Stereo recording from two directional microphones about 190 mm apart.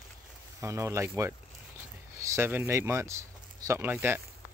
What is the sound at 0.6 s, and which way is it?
Speech, 15° right (ahead or behind).